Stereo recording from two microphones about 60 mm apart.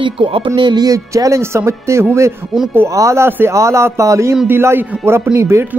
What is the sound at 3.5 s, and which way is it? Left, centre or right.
Speech, right.